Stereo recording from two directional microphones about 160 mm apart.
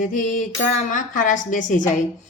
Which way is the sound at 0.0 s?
55° left (ahead or behind).